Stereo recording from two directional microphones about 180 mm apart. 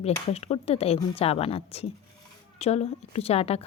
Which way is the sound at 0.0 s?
35° left (ahead or behind).